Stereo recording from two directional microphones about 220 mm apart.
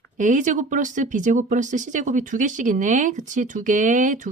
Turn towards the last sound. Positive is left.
turn(degrees=-35)  # may be behind; listen again after turning